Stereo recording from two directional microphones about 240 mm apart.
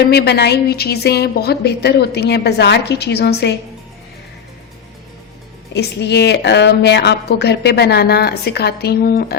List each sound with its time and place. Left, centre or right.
0.0 s a woman's voice: left
5.7 s a woman's voice: left